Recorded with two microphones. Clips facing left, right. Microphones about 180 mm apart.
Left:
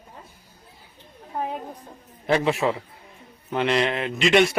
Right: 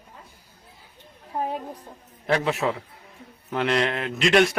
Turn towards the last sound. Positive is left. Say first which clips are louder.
# left 1 dB
turn(degrees=0)  # may be behind; listen again after turning